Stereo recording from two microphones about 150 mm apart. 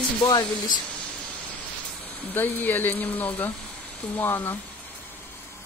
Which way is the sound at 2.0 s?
10° left (ahead or behind).